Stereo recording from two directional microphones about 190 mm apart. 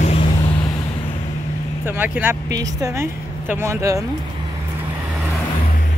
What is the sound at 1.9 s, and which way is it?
Speech, 10° right (ahead or behind).